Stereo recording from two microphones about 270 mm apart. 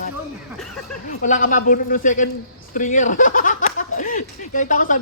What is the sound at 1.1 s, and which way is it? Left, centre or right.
Speech, left.